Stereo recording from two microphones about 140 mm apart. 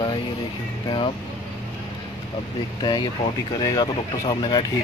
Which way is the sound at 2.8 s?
30° left (ahead or behind).